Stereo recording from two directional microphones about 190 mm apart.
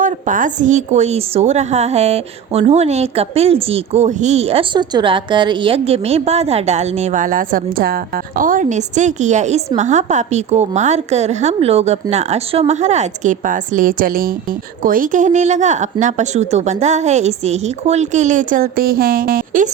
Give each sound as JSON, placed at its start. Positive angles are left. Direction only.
{"t": 0.0, "sound": "a woman's voice", "side_deg": -45}